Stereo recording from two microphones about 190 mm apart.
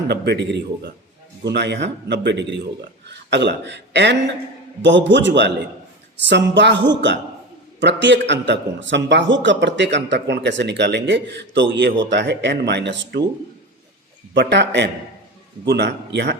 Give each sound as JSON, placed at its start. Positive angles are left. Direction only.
{"t": 0.1, "sound": "speech", "side_deg": -60}
{"t": 14.3, "sound": "speech", "side_deg": -65}